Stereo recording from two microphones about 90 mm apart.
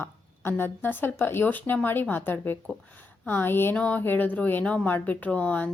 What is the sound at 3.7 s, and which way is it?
Speech, 15° left (ahead or behind).